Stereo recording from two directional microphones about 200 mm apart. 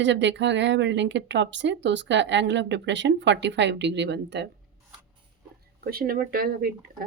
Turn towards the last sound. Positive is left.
turn(degrees=-45)  # may be behind; listen again after turning